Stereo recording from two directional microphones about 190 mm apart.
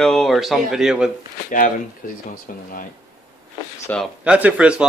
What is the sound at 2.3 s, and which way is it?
Speech, 50° left (ahead or behind).